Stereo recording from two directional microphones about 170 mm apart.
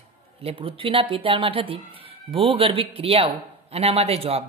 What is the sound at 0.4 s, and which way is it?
Speech, 35° right (ahead or behind).